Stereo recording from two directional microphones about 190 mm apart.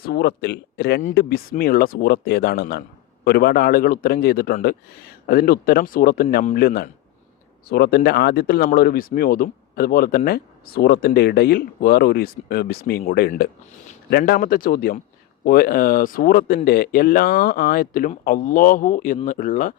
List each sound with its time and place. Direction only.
0.0 s speech: 55° left (ahead or behind)